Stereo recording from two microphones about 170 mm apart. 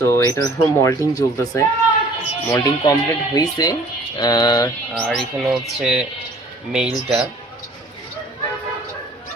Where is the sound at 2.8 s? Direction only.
20° left (ahead or behind).